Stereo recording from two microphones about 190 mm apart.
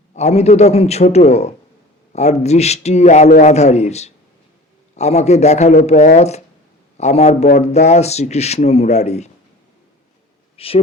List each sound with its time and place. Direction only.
0.1 s speech: 35° left (ahead or behind)
10.6 s speech: 30° left (ahead or behind)